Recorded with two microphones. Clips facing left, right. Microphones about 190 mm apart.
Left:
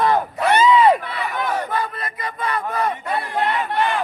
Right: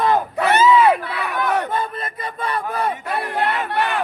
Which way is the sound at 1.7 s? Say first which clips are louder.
Right 1 dB; 25° right (ahead or behind).